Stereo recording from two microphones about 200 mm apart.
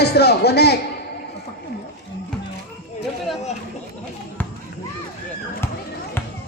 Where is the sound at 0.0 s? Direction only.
55° left (ahead or behind).